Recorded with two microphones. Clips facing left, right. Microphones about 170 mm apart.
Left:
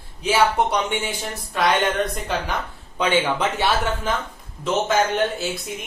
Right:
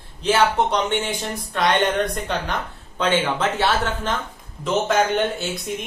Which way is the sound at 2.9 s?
15° left (ahead or behind).